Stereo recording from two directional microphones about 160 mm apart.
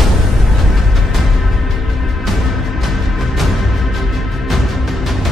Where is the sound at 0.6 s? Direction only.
Centre (ahead or behind).